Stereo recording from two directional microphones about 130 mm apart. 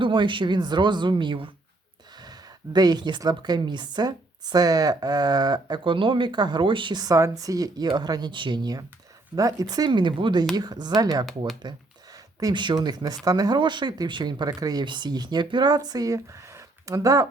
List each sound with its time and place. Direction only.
0.0 s speech: 40° right (ahead or behind)